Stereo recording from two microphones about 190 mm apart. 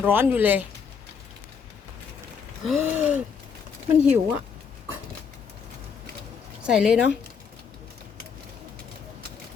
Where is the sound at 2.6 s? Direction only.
5° right (ahead or behind).